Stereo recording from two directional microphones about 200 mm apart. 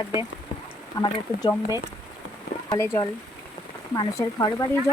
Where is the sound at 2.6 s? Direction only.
15° left (ahead or behind).